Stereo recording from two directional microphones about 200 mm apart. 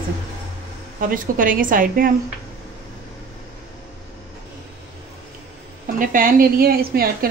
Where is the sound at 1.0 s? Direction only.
45° right (ahead or behind).